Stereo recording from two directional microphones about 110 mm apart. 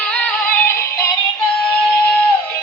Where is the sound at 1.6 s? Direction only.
5° left (ahead or behind).